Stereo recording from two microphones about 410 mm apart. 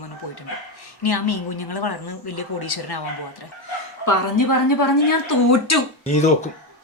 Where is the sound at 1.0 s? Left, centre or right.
Left.